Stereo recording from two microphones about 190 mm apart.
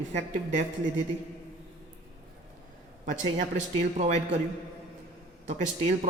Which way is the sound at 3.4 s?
40° right (ahead or behind).